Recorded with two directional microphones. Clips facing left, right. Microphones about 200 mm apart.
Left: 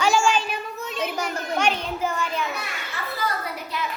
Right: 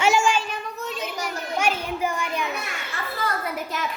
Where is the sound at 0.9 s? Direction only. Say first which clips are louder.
Left 7 dB; 55° left (ahead or behind).